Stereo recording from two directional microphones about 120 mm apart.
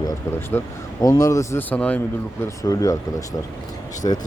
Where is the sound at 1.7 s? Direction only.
10° left (ahead or behind).